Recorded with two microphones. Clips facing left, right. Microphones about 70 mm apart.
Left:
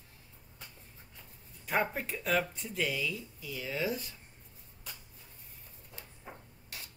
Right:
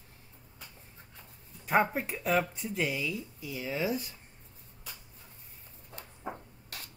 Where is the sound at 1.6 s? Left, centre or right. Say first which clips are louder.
Right 5 dB; right.